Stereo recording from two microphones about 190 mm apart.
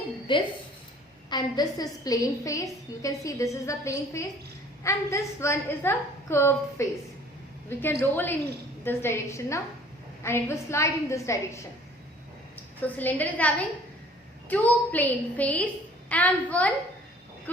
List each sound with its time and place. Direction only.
0.3 s a woman's voice: 25° left (ahead or behind)
12.8 s a woman's voice: 10° left (ahead or behind)